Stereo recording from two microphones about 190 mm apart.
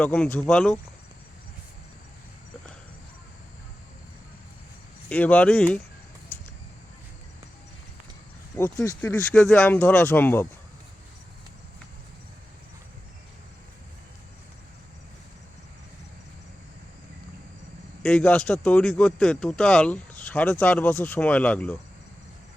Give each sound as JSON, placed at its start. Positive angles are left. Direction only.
{"t": 0.0, "sound": "speech", "side_deg": 5}
{"t": 5.0, "sound": "speech", "side_deg": 5}
{"t": 8.7, "sound": "speech", "side_deg": 20}
{"t": 9.0, "sound": "speech", "side_deg": 5}
{"t": 18.0, "sound": "speech", "side_deg": 5}